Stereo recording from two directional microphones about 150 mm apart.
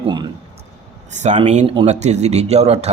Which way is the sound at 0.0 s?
30° right (ahead or behind).